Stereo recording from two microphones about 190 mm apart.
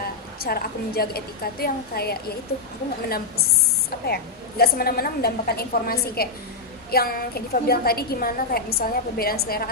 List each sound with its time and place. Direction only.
0.3 s a woman's voice: 50° left (ahead or behind)
4.0 s a woman's voice: 55° left (ahead or behind)